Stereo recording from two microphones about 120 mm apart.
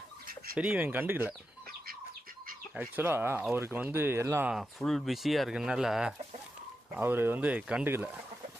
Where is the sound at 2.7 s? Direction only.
15° right (ahead or behind).